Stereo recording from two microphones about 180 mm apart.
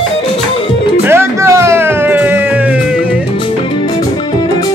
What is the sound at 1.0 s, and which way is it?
Music, 15° right (ahead or behind).